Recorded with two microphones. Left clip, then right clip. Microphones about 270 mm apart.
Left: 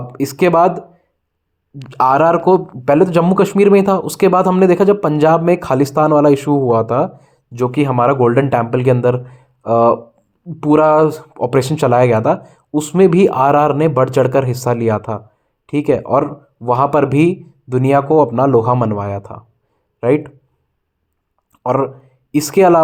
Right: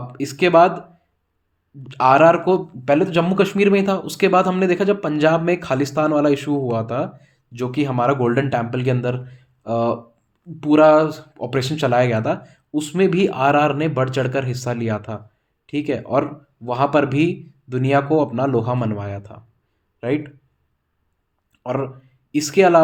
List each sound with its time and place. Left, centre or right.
0.1 s speech: left
1.9 s speech: left
21.6 s speech: left